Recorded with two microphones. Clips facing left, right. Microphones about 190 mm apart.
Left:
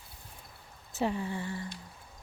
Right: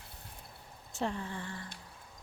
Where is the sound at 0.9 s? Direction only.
5° left (ahead or behind).